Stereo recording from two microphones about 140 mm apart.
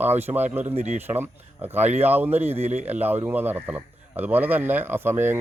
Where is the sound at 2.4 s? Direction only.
50° right (ahead or behind).